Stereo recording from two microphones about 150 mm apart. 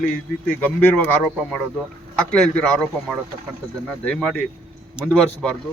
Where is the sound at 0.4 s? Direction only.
10° left (ahead or behind).